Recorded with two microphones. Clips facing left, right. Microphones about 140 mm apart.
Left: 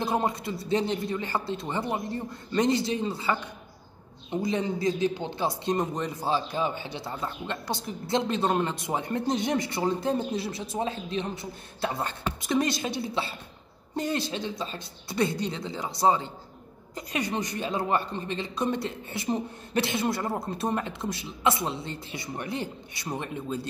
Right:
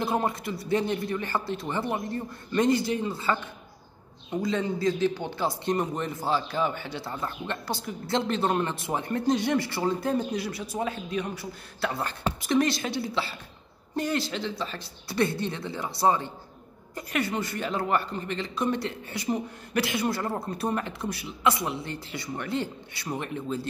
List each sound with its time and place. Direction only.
0.0 s a man's voice: 25° left (ahead or behind)